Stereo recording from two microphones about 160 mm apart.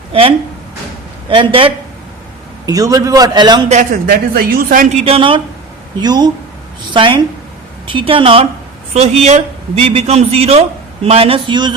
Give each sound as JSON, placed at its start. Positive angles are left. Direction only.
{"t": 0.1, "sound": "a man's voice", "side_deg": -35}
{"t": 2.6, "sound": "a man's voice", "side_deg": -20}
{"t": 3.7, "sound": "speech", "side_deg": -45}
{"t": 4.1, "sound": "a man's voice", "side_deg": -70}